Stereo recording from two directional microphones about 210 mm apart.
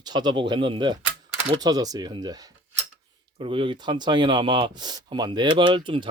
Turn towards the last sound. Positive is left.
turn(degrees=-25)  # may be behind; listen again after turning